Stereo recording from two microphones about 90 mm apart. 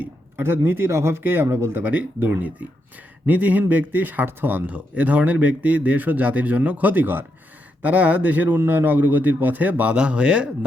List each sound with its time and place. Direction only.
0.0 s a man's voice: 25° right (ahead or behind)